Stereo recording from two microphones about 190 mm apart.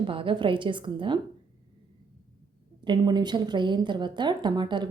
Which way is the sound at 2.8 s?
25° right (ahead or behind).